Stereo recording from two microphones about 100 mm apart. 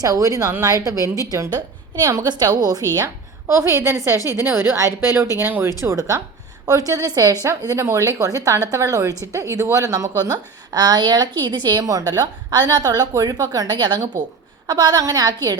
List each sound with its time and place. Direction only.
0.0 s a woman's voice: 35° right (ahead or behind)
3.0 s a woman's voice: 25° right (ahead or behind)